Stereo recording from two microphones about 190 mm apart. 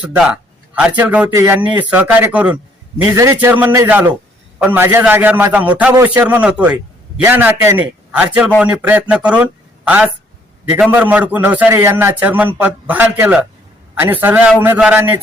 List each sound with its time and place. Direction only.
0.7 s a man's voice: 10° right (ahead or behind)